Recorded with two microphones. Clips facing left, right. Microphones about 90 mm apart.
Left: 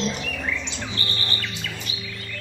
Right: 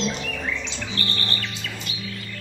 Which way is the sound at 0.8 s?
20° left (ahead or behind).